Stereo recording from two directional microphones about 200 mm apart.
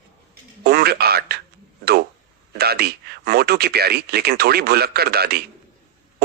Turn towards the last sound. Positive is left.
turn(degrees=-50)  # may be behind; listen again after turning